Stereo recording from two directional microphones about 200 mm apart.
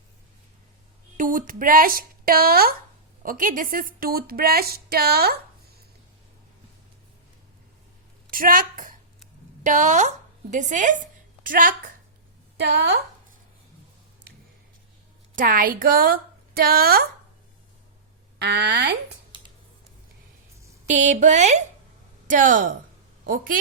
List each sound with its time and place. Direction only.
1.1 s a woman's voice: 40° right (ahead or behind)
8.3 s a woman's voice: 45° right (ahead or behind)
15.4 s a woman's voice: 45° right (ahead or behind)
18.3 s speech: 55° right (ahead or behind)
20.8 s a woman's voice: 35° right (ahead or behind)